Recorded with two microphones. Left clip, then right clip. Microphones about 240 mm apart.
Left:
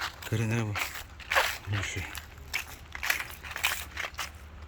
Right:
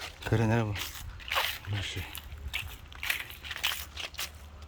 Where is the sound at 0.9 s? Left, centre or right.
Centre.